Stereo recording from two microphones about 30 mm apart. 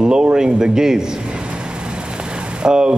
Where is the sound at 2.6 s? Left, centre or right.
Right.